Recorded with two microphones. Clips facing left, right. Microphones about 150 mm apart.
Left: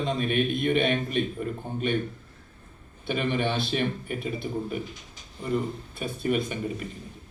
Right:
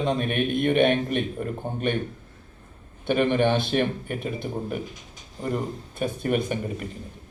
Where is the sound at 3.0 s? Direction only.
50° right (ahead or behind).